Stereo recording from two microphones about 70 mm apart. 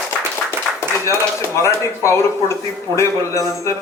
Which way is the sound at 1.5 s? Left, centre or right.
Left.